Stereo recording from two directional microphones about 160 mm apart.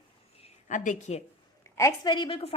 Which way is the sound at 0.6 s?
50° left (ahead or behind).